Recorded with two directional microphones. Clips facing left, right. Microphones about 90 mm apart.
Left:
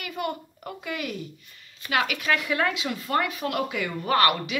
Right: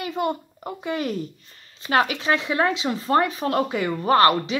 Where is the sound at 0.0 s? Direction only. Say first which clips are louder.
Right 6 dB; 25° right (ahead or behind).